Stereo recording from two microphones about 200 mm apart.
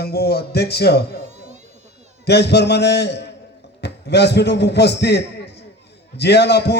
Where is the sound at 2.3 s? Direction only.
55° left (ahead or behind).